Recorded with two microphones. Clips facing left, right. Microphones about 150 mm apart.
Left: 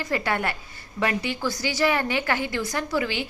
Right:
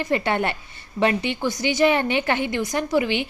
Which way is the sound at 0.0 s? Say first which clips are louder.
Right 4 dB; 25° right (ahead or behind).